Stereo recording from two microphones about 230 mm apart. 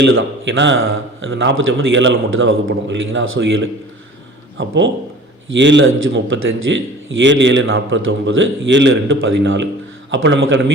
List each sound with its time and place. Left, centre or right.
0.0 s a man's voice: right